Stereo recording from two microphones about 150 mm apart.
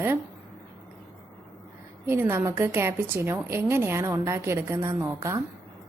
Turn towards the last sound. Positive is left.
turn(degrees=-20)  # may be behind; listen again after turning